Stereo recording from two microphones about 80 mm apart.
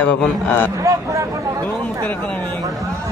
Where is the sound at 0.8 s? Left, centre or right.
Right.